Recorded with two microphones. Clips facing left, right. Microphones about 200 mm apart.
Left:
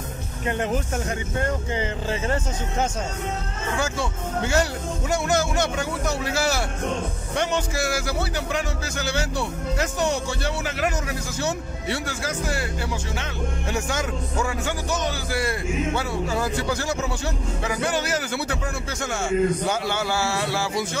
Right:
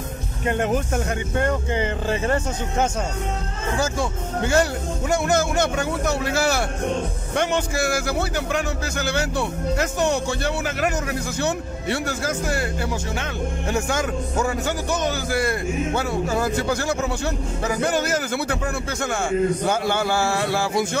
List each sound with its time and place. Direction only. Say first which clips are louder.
1.4 s speech: right 4 dB; 60° right (ahead or behind)
13.7 s speech: right 4 dB; 50° right (ahead or behind)